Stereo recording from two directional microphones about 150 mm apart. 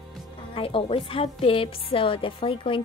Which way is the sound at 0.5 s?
35° left (ahead or behind).